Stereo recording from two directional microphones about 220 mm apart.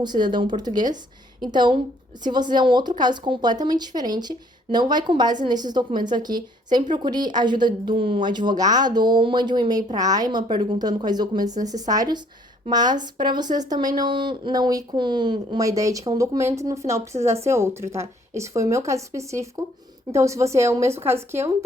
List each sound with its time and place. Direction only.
0.0 s speech: 20° right (ahead or behind)